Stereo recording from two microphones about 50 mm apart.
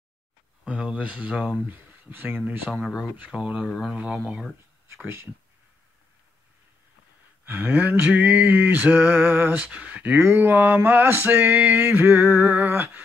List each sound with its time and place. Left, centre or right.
0.7 s speech: right
1.3 s speech: centre
1.7 s speech: right
3.3 s speech: centre
4.8 s speech: right
7.4 s speech: right
7.7 s a sound: right
9.6 s speech: right
10.1 s speech: right
10.6 s a sound: right